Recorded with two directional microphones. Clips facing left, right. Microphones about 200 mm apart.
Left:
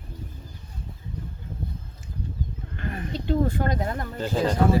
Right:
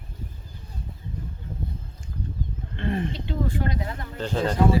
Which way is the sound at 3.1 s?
45° left (ahead or behind).